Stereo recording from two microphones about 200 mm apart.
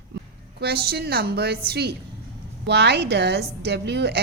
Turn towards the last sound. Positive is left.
turn(degrees=-55)  # may be behind; listen again after turning